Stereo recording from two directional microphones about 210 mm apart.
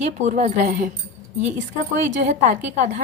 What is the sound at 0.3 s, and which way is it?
Speech, 35° right (ahead or behind).